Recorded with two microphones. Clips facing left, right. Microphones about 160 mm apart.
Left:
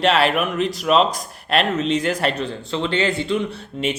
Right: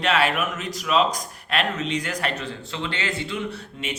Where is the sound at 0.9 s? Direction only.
45° left (ahead or behind).